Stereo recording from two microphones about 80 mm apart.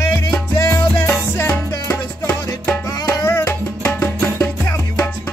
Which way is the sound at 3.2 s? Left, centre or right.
Left.